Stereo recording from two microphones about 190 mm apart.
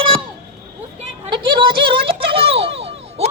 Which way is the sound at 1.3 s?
25° right (ahead or behind).